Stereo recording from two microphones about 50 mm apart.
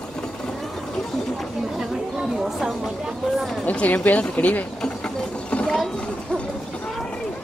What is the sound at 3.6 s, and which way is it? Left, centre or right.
Speech, left.